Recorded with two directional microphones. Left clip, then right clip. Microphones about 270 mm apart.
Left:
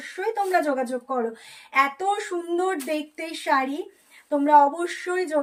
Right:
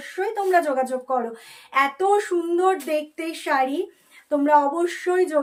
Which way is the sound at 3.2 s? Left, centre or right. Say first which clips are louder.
Left 1 dB; centre.